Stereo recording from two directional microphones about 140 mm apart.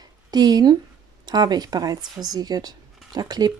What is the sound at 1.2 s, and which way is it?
Speech, 30° right (ahead or behind).